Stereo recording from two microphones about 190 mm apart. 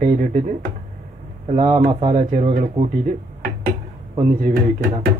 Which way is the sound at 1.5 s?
30° right (ahead or behind).